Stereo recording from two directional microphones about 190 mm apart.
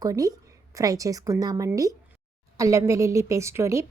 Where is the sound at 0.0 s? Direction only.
20° right (ahead or behind).